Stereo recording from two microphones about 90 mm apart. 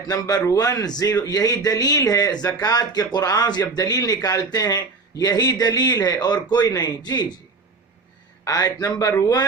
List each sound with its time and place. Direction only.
0.1 s a man's voice: 45° left (ahead or behind)
8.4 s speech: 40° left (ahead or behind)